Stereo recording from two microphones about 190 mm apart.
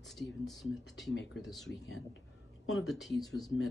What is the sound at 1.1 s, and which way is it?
Speech, 80° left.